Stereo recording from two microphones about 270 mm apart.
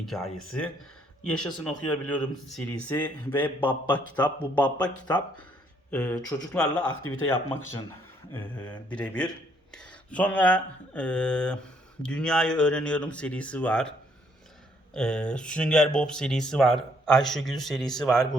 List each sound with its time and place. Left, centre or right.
0.0 s speech: centre
1.7 s speech: centre
5.9 s speech: centre
6.9 s speech: left
7.3 s speech: centre
14.9 s speech: centre